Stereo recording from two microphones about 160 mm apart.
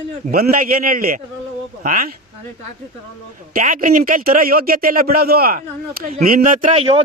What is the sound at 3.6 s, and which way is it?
A man's voice, 55° right (ahead or behind).